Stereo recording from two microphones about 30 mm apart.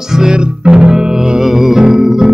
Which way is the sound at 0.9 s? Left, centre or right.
Right.